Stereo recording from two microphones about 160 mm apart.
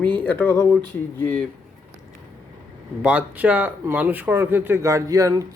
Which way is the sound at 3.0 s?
10° right (ahead or behind).